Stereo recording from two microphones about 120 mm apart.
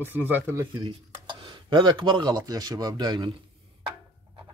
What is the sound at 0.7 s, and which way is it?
Speech, 45° right (ahead or behind).